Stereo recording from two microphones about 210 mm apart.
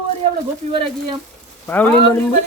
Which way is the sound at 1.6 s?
10° left (ahead or behind).